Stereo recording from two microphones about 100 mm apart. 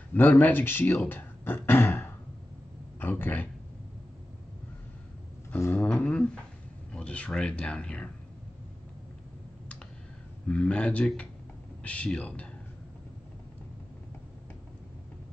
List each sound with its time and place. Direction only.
0.1 s speech: 15° left (ahead or behind)
3.0 s a sound: 20° left (ahead or behind)
5.8 s speech: 10° left (ahead or behind)
10.5 s speech: 10° left (ahead or behind)